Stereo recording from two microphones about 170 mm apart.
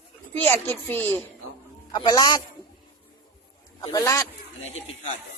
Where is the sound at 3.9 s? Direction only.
20° left (ahead or behind).